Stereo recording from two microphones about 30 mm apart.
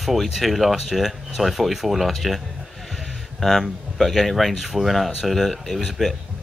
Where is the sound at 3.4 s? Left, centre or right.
Centre.